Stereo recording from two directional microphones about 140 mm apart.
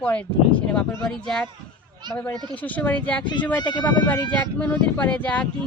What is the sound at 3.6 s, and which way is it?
Speech, 30° left (ahead or behind).